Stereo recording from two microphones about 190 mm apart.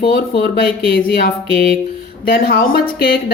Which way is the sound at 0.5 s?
55° left (ahead or behind).